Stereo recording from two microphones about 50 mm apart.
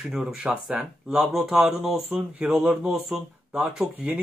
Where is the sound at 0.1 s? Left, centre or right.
Centre.